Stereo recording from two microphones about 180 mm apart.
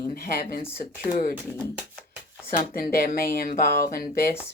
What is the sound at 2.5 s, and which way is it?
Speech, 50° left (ahead or behind).